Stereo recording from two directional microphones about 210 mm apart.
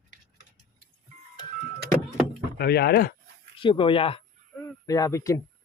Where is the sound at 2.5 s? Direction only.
50° left (ahead or behind).